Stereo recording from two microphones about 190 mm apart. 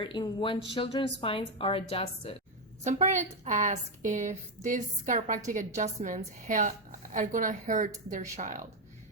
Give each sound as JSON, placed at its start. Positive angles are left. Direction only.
{"t": 0.0, "sound": "a woman's voice", "side_deg": 25}
{"t": 2.8, "sound": "a woman's voice", "side_deg": -35}